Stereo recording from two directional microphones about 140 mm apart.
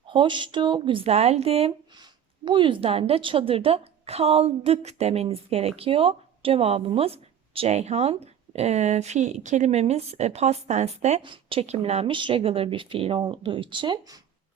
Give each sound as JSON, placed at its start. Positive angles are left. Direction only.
{"t": 0.1, "sound": "a woman's voice", "side_deg": -35}
{"t": 11.2, "sound": "speech", "side_deg": -40}